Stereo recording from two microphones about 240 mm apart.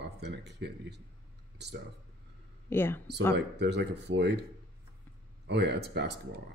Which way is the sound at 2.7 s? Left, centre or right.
Centre.